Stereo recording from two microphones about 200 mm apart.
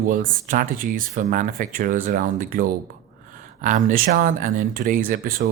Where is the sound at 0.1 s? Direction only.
40° right (ahead or behind).